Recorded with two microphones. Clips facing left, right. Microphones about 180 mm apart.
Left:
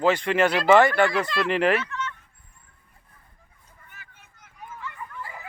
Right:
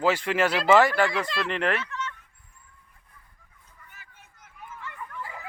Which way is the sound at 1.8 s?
35° right (ahead or behind).